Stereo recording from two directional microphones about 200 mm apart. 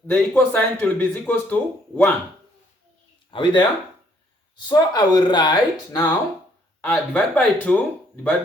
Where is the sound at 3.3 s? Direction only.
25° left (ahead or behind).